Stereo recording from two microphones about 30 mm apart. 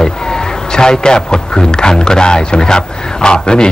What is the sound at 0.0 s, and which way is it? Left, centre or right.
A man's voice, left.